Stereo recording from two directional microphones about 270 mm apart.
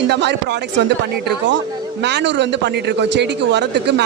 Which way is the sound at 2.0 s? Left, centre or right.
Right.